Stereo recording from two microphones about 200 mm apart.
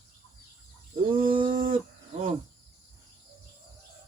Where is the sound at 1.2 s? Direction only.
45° right (ahead or behind).